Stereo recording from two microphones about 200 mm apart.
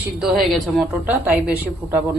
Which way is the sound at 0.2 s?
Centre (ahead or behind).